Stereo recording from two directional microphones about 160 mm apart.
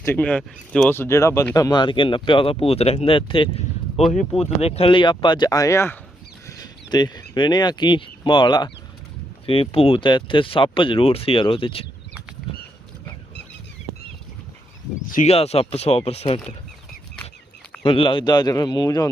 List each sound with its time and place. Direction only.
0.0 s speech: 10° left (ahead or behind); by 11.9 s 35° left (ahead or behind)
15.1 s speech: 45° left (ahead or behind)
17.8 s speech: 35° left (ahead or behind)